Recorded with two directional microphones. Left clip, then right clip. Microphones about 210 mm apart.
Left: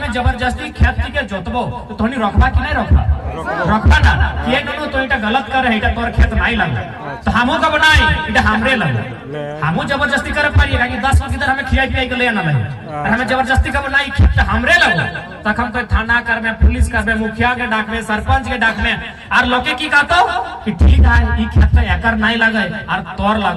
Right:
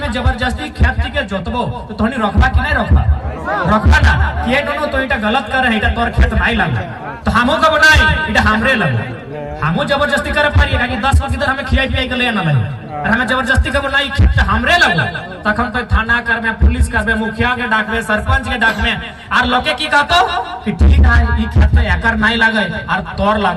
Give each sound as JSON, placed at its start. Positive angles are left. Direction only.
{"t": 0.0, "sound": "speech", "side_deg": -40}
{"t": 21.8, "sound": "speech", "side_deg": -40}